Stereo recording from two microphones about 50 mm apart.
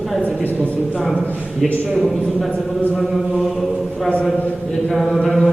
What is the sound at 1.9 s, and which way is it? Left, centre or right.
Speech, centre.